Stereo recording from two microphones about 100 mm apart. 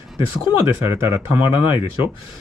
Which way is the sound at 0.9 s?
25° right (ahead or behind).